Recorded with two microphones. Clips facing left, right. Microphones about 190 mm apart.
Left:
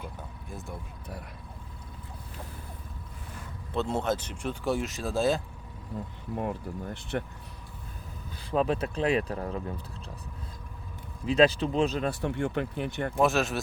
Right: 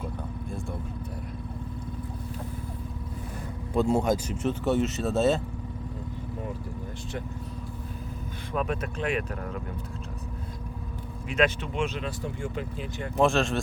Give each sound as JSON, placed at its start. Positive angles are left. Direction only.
{"t": 3.8, "sound": "speech", "side_deg": -10}
{"t": 8.5, "sound": "speech", "side_deg": 30}
{"t": 11.3, "sound": "speech", "side_deg": 35}
{"t": 12.2, "sound": "speech", "side_deg": 65}
{"t": 13.1, "sound": "speech", "side_deg": 5}